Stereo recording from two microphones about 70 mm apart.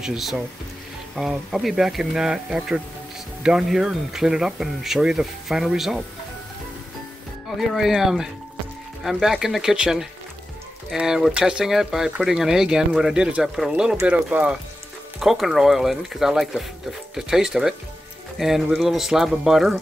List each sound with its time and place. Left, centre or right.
0.0 s speech: centre
7.4 s speech: centre
15.1 s speech: centre